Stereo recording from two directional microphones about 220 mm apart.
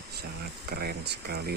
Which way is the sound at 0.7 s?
45° right (ahead or behind).